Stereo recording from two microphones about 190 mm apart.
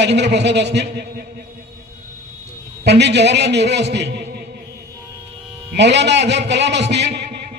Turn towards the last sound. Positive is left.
turn(degrees=-65)  # may be behind; listen again after turning